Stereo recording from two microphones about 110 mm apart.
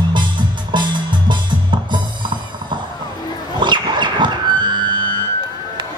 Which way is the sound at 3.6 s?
45° right (ahead or behind).